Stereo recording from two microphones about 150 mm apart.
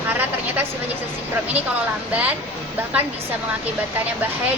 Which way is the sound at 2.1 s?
10° right (ahead or behind).